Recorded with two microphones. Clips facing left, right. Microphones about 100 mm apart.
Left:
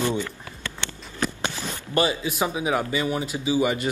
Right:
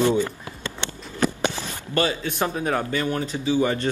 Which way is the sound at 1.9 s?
15° left (ahead or behind).